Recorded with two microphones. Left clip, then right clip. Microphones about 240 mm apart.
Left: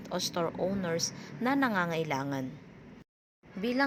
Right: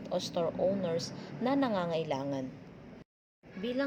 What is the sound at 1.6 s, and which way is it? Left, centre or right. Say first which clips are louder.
Speech: left 2 dB; left.